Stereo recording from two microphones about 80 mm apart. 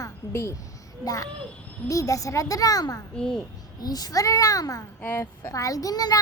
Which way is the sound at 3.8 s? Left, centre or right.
Left.